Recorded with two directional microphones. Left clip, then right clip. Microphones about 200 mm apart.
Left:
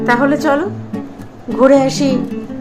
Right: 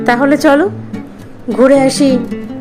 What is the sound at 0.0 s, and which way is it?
A woman's voice, 40° right (ahead or behind).